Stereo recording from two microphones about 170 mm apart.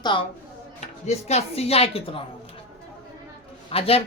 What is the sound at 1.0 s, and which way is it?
Speech, 40° left (ahead or behind).